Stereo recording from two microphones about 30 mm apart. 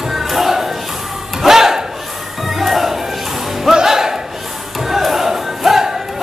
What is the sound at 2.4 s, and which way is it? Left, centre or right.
Music, centre.